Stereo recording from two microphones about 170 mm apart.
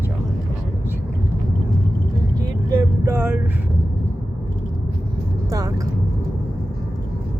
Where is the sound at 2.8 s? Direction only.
15° right (ahead or behind).